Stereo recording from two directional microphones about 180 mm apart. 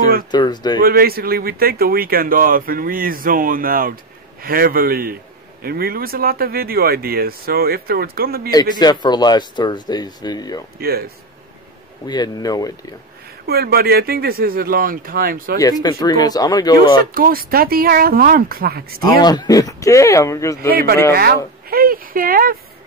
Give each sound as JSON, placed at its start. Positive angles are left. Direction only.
{"t": 0.3, "sound": "speech", "side_deg": 25}
{"t": 0.7, "sound": "speech", "side_deg": -55}
{"t": 8.5, "sound": "speech", "side_deg": 25}
{"t": 10.8, "sound": "speech", "side_deg": -60}
{"t": 12.1, "sound": "speech", "side_deg": 20}
{"t": 13.5, "sound": "speech", "side_deg": -60}
{"t": 15.8, "sound": "speech", "side_deg": 20}
{"t": 17.1, "sound": "speech", "side_deg": -55}
{"t": 19.0, "sound": "speech", "side_deg": 25}
{"t": 20.7, "sound": "speech", "side_deg": -55}